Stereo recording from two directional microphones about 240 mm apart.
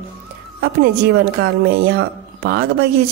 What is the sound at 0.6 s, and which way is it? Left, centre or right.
Speech, right.